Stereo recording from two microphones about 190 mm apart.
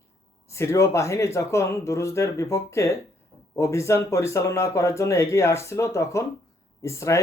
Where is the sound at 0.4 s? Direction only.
15° left (ahead or behind).